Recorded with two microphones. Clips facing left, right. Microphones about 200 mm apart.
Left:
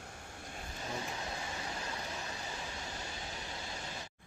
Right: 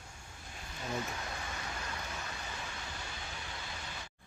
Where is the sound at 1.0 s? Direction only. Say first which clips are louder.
Even; 25° left (ahead or behind).